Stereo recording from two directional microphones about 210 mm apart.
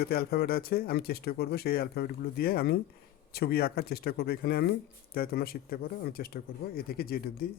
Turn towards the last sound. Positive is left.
turn(degrees=45)  # may be behind; listen again after turning